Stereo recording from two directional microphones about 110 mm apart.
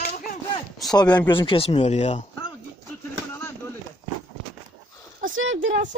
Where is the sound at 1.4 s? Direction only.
55° left (ahead or behind); by 2.2 s 90° left.